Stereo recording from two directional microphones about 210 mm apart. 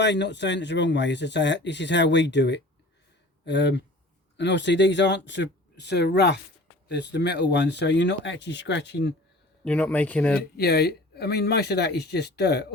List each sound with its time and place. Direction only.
0.0 s speech: 55° left (ahead or behind)
9.6 s speech: 5° left (ahead or behind)
10.6 s speech: 50° left (ahead or behind)